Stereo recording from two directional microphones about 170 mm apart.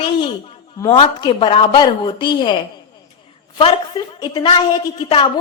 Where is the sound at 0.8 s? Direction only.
25° left (ahead or behind).